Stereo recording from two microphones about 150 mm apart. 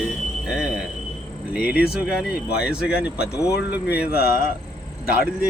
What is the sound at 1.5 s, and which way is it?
Speech, 10° right (ahead or behind).